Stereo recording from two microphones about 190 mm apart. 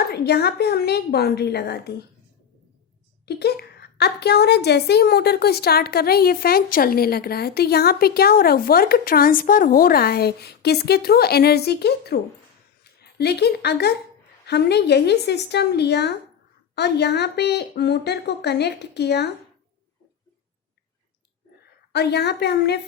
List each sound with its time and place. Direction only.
0.0 s a woman's voice: 60° left (ahead or behind)
3.2 s a woman's voice: 60° left (ahead or behind)
21.9 s a woman's voice: 60° left (ahead or behind)